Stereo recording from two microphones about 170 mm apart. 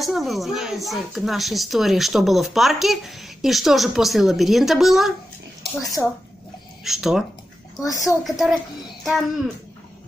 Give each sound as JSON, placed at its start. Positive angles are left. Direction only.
{"t": 0.0, "sound": "speech", "side_deg": 0}
{"t": 5.8, "sound": "a woman's voice", "side_deg": 20}
{"t": 6.8, "sound": "speech", "side_deg": 0}
{"t": 7.8, "sound": "a woman's voice", "side_deg": 20}
{"t": 8.2, "sound": "speech", "side_deg": 0}